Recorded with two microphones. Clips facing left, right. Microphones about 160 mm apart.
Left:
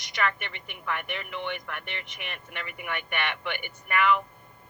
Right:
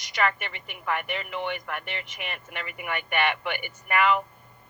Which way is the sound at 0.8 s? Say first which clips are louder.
Right 4 dB; 50° right (ahead or behind).